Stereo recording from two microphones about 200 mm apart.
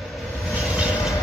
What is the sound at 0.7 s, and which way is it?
Train, 5° right (ahead or behind).